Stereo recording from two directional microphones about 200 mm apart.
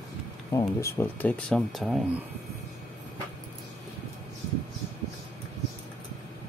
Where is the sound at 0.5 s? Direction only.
10° left (ahead or behind).